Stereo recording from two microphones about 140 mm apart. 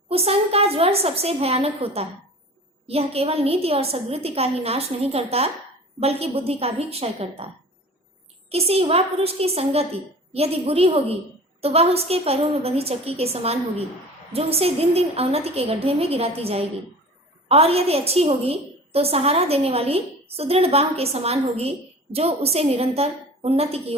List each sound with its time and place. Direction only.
0.1 s a woman's voice: 45° right (ahead or behind)
8.4 s a woman's voice: 45° right (ahead or behind)